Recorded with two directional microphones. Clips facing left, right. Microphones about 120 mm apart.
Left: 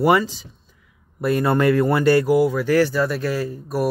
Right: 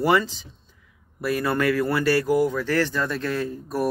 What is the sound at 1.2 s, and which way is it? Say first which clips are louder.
Speech: left 5 dB; 25° left (ahead or behind).